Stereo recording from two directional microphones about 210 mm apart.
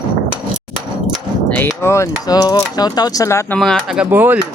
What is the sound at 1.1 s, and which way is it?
Speech, 5° left (ahead or behind).